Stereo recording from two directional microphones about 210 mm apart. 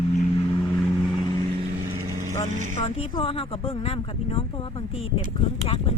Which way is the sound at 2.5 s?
35° right (ahead or behind).